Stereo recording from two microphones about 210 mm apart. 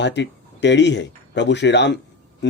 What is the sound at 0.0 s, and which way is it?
A man's voice, 55° left (ahead or behind).